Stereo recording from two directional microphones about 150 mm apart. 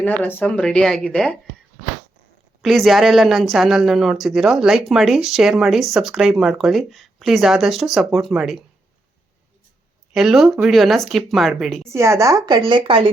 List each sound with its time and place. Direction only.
0.0 s speech: 10° left (ahead or behind)
2.6 s speech: centre (ahead or behind)
10.2 s speech: centre (ahead or behind)
11.9 s a woman's voice: 20° right (ahead or behind); by 13.1 s 35° right (ahead or behind)